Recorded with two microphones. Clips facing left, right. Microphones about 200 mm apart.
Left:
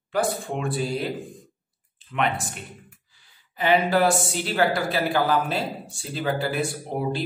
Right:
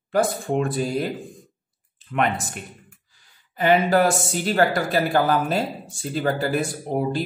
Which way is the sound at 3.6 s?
45° right (ahead or behind).